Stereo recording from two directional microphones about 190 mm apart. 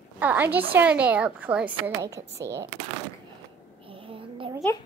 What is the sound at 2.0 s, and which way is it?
Speech, 15° right (ahead or behind).